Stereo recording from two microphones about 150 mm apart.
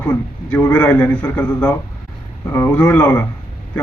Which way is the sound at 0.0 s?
15° left (ahead or behind).